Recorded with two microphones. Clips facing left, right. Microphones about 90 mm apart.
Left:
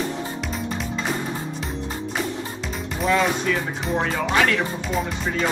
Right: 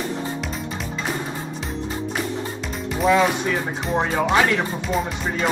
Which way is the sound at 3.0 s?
5° right (ahead or behind).